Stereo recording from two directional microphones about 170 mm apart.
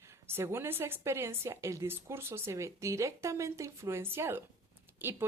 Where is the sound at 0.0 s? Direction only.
15° right (ahead or behind).